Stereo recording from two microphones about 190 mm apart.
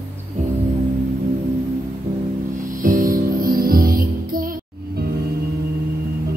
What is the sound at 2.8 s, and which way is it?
Music, 45° right (ahead or behind).